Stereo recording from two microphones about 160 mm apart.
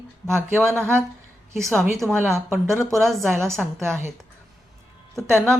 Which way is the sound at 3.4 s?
15° right (ahead or behind).